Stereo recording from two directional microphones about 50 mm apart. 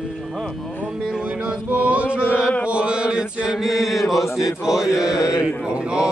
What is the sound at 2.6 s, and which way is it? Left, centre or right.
Chant, right.